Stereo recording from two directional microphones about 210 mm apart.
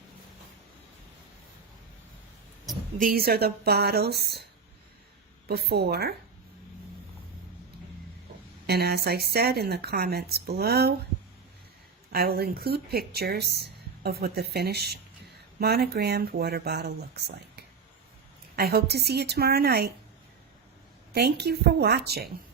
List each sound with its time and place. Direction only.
3.0 s speech: 45° right (ahead or behind)
5.5 s speech: 50° right (ahead or behind)
8.6 s speech: 50° right (ahead or behind)
12.1 s speech: 50° right (ahead or behind)
21.1 s speech: 50° right (ahead or behind)